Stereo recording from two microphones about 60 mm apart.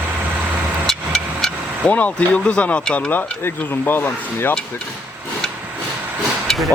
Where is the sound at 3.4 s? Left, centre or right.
Left.